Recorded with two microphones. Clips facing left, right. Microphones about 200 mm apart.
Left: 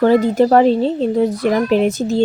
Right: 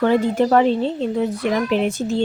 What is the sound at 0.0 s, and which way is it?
Speech, 40° left (ahead or behind).